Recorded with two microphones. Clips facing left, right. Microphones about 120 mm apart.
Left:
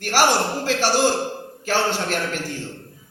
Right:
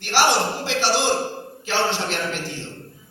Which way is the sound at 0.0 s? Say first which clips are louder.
Left 1 dB; 45° left (ahead or behind).